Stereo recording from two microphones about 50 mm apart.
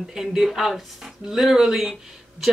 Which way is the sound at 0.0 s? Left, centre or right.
Centre.